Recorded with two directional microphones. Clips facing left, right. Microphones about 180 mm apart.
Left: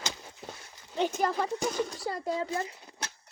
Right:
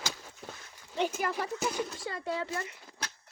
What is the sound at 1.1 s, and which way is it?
Speech, 5° right (ahead or behind).